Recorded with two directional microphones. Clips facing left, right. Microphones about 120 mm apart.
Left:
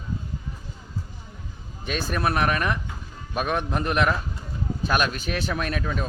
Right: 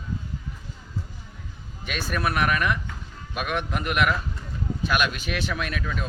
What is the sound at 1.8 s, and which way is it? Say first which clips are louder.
Speech: left 2 dB; 35° left (ahead or behind).